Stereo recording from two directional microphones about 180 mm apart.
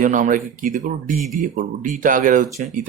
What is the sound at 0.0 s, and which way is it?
Speech, 45° right (ahead or behind).